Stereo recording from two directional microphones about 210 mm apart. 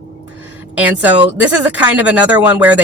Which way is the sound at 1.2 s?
10° right (ahead or behind).